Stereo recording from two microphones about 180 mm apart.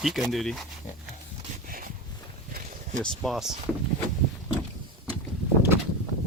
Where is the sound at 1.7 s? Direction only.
50° right (ahead or behind).